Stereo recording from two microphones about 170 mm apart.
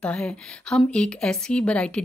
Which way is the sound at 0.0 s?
5° left (ahead or behind).